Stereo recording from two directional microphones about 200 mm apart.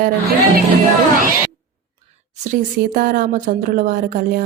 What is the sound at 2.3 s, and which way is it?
Speech, 35° right (ahead or behind).